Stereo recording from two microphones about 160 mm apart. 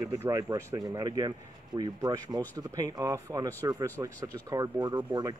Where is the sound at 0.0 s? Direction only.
20° right (ahead or behind).